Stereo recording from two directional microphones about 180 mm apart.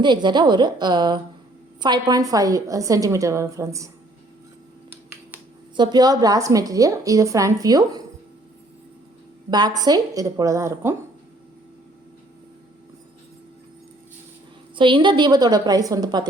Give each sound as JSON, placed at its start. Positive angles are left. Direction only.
{"t": 0.0, "sound": "a woman's voice", "side_deg": -25}
{"t": 5.7, "sound": "a woman's voice", "side_deg": -25}
{"t": 9.5, "sound": "a woman's voice", "side_deg": -25}
{"t": 14.8, "sound": "a woman's voice", "side_deg": -25}